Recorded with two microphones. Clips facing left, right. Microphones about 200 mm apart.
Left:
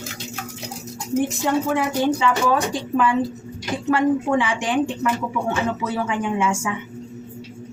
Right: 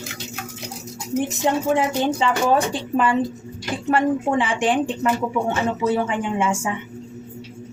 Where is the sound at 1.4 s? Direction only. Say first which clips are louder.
Right 1 dB; 25° right (ahead or behind).